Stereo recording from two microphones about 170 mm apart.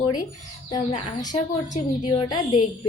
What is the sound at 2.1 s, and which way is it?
Speech, 30° left (ahead or behind).